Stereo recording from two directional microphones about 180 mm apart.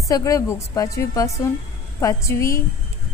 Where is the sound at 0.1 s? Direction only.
15° left (ahead or behind).